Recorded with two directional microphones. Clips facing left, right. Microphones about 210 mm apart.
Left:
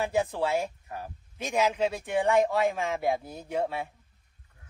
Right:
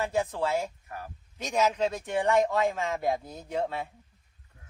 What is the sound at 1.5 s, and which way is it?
A man's voice, 10° left (ahead or behind).